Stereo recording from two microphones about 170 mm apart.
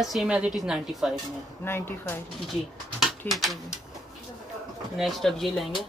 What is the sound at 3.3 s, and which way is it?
Speech, centre (ahead or behind).